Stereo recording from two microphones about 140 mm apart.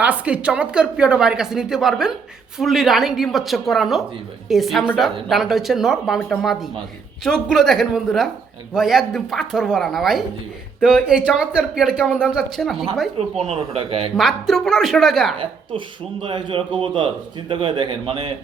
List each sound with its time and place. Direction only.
0.0 s speech: 10° right (ahead or behind)
13.1 s speech: 45° right (ahead or behind)
14.2 s speech: centre (ahead or behind)
16.2 s speech: 35° right (ahead or behind)